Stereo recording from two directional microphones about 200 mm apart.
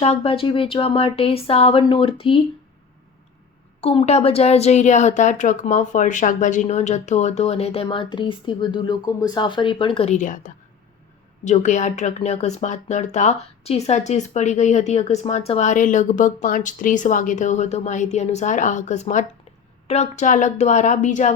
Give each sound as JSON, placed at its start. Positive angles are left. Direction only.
{"t": 0.0, "sound": "speech", "side_deg": 30}
{"t": 3.8, "sound": "speech", "side_deg": 30}